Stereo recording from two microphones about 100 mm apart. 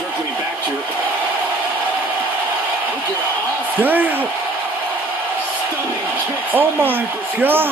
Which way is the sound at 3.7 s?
20° right (ahead or behind).